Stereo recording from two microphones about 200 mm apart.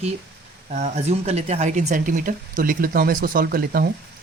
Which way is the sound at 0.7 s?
35° right (ahead or behind).